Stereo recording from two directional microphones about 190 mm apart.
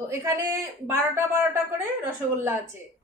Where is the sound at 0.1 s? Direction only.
15° right (ahead or behind).